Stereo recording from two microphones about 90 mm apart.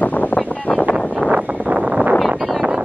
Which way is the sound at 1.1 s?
10° right (ahead or behind).